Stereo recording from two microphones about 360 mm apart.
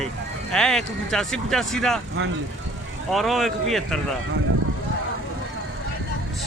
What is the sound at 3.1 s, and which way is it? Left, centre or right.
Speech, centre.